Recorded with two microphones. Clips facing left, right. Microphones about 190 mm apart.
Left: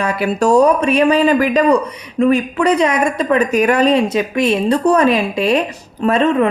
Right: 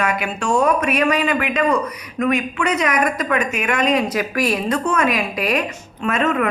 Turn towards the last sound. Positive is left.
turn(degrees=30)  # may be behind; listen again after turning